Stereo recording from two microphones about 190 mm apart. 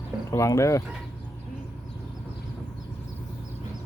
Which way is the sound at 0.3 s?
15° left (ahead or behind).